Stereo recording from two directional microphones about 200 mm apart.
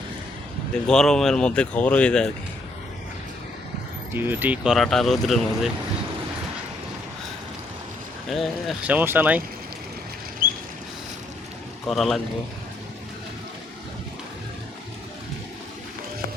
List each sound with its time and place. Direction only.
0.9 s speech: 5° left (ahead or behind)
4.1 s speech: 10° right (ahead or behind)
8.3 s speech: centre (ahead or behind)
10.4 s a sound: 45° right (ahead or behind)
11.9 s speech: centre (ahead or behind)